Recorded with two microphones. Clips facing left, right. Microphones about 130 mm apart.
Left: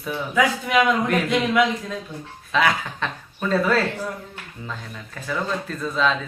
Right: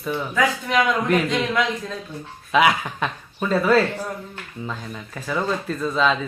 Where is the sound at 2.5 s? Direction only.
10° right (ahead or behind).